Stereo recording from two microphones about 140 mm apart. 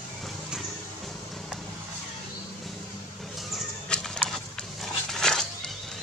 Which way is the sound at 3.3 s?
Centre (ahead or behind).